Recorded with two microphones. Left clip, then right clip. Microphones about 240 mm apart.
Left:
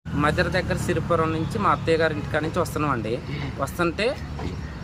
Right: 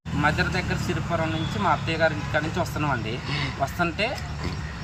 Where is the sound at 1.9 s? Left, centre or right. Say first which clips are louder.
Left 2 dB; centre.